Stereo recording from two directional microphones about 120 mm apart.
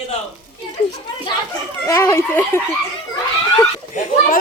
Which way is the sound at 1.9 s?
20° left (ahead or behind).